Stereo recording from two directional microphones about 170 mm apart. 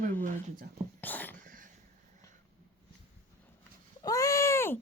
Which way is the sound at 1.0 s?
10° left (ahead or behind).